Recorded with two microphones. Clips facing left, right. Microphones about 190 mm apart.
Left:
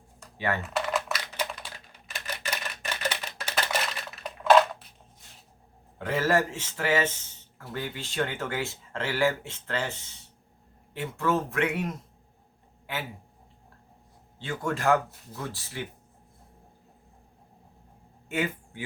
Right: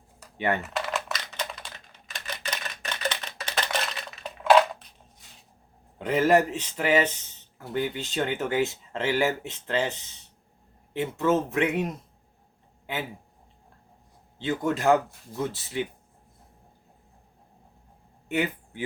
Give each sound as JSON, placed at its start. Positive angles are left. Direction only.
{"t": 0.3, "sound": "speech", "side_deg": -20}
{"t": 0.9, "sound": "typing", "side_deg": 5}
{"t": 6.0, "sound": "speech", "side_deg": -20}
{"t": 14.4, "sound": "speech", "side_deg": -20}